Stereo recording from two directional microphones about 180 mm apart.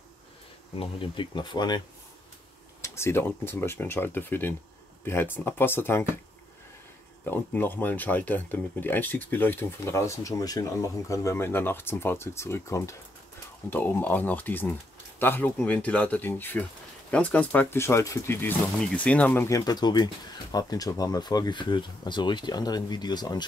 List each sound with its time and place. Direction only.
0.7 s speech: 30° left (ahead or behind)
2.8 s speech: 15° left (ahead or behind)
7.2 s speech: 10° left (ahead or behind)